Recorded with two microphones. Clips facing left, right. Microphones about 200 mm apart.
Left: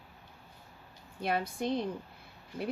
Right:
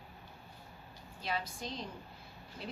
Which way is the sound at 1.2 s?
60° left (ahead or behind).